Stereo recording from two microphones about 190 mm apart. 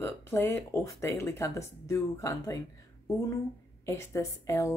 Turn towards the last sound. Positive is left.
turn(degrees=15)  # may be behind; listen again after turning